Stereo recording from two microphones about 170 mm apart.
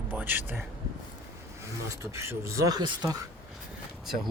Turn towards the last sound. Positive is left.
turn(degrees=0)  # may be behind; listen again after turning